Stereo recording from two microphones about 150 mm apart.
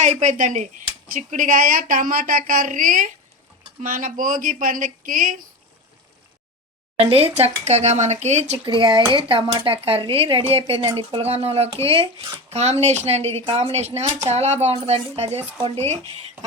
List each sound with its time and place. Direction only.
0.0 s speech: 55° right (ahead or behind)
7.0 s speech: 40° right (ahead or behind)
8.6 s speech: 35° right (ahead or behind)